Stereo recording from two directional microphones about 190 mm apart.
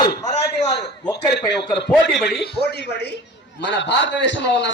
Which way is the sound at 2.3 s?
60° left (ahead or behind).